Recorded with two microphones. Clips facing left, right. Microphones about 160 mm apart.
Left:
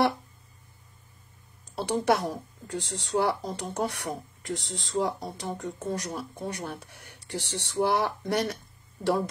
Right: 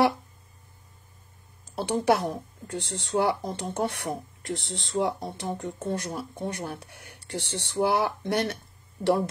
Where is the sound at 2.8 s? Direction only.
70° right (ahead or behind).